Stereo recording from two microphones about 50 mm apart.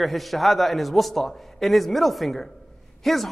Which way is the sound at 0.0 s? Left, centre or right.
Centre.